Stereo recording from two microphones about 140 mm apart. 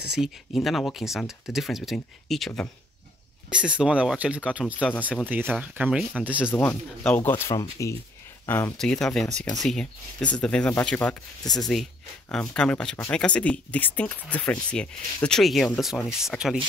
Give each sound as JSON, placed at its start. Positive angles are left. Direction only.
{"t": 0.0, "sound": "speech", "side_deg": -5}
{"t": 6.5, "sound": "speech", "side_deg": 15}
{"t": 8.7, "sound": "speech", "side_deg": 5}
{"t": 11.4, "sound": "speech", "side_deg": 30}
{"t": 12.3, "sound": "speech", "side_deg": 5}